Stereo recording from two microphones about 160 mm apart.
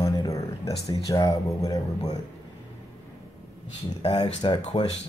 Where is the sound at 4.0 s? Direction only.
30° left (ahead or behind).